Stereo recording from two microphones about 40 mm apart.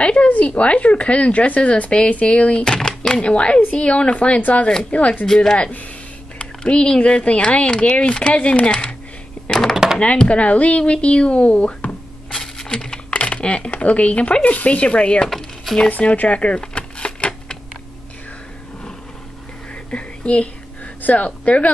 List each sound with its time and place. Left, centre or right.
0.0 s speech: left
3.2 s speech: left
5.2 s speech: centre
6.3 s speech: left
9.9 s speech: left
12.3 s a sound: centre
13.1 s computer keyboard: left
13.7 s speech: left
15.2 s typing: centre
16.0 s speech: left
16.6 s a sound: left
19.7 s a sound: left
21.0 s speech: left